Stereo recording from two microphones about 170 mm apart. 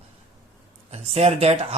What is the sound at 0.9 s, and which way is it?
Speech, 40° right (ahead or behind).